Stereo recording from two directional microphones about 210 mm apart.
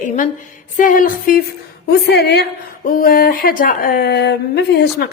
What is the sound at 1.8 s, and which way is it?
A woman's voice, 50° left (ahead or behind).